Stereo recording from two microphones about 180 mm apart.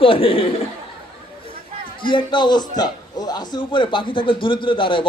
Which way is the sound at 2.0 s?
25° left (ahead or behind).